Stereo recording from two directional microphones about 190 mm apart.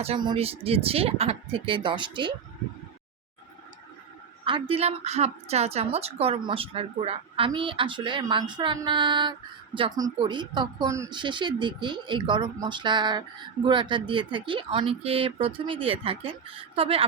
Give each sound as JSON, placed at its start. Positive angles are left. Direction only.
{"t": 0.0, "sound": "speech", "side_deg": -25}
{"t": 4.4, "sound": "a woman's voice", "side_deg": -25}